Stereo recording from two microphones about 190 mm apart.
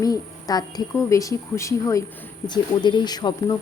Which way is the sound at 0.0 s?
20° left (ahead or behind).